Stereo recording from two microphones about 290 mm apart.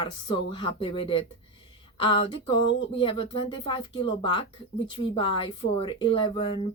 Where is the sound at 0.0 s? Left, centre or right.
Centre.